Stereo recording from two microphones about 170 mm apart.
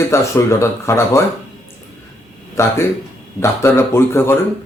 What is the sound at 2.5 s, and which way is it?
Speech, 15° left (ahead or behind).